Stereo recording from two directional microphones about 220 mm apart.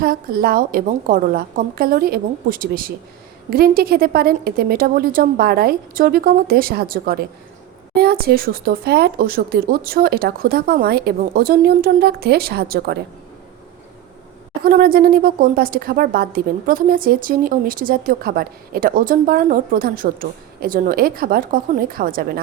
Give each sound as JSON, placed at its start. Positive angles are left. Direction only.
{"t": 0.0, "sound": "a woman's voice", "side_deg": -40}
{"t": 14.6, "sound": "a woman's voice", "side_deg": -40}